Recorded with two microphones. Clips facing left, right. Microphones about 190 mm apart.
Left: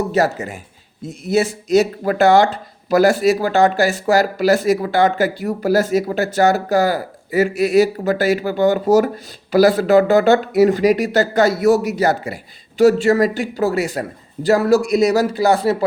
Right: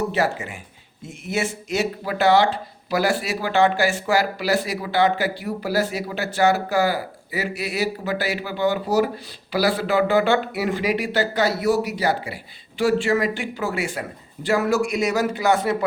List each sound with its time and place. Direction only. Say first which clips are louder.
0.1 s speech: left 5 dB; 40° left (ahead or behind)